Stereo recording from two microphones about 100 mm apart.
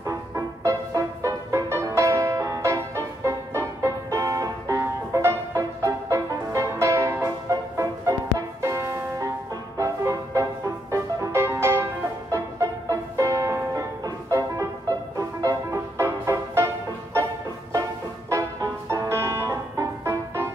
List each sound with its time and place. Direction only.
0.0 s music: 35° right (ahead or behind)
18.3 s music: 35° right (ahead or behind)